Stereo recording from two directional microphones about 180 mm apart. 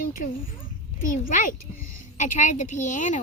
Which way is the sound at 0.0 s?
50° left (ahead or behind).